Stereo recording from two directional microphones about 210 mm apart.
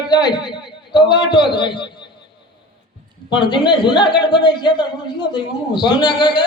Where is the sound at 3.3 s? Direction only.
20° left (ahead or behind).